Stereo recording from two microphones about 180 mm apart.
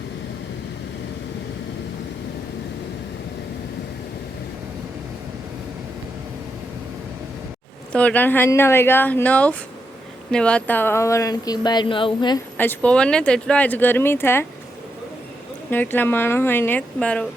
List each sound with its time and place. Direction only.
7.9 s speech: 10° left (ahead or behind); by 12.4 s 25° left (ahead or behind)
12.5 s speech: 10° left (ahead or behind)
15.7 s speech: 10° left (ahead or behind)